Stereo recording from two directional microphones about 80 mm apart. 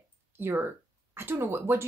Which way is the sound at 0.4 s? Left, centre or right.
Right.